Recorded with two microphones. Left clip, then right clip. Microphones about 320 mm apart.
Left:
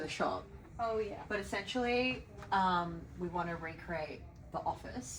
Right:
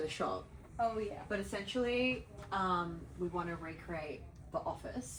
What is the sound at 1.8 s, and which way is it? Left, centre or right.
Speech, left.